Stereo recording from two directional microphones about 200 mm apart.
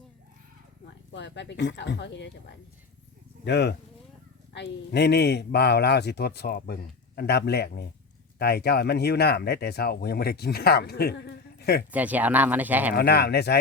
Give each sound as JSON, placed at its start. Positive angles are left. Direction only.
{"t": 0.9, "sound": "speech", "side_deg": 60}
{"t": 3.4, "sound": "speech", "side_deg": 55}
{"t": 11.9, "sound": "speech", "side_deg": -10}
{"t": 13.0, "sound": "speech", "side_deg": 55}